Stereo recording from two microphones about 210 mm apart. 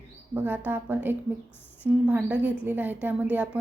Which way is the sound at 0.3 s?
10° right (ahead or behind).